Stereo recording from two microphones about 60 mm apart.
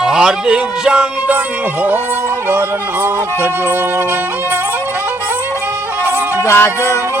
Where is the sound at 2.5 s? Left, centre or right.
Right.